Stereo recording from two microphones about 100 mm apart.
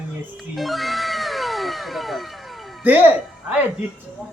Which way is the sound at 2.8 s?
15° right (ahead or behind).